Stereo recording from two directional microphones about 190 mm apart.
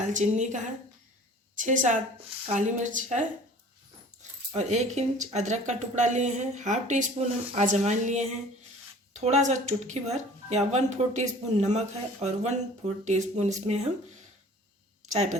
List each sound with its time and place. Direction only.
0.0 s speech: 40° right (ahead or behind)
15.0 s speech: 40° right (ahead or behind)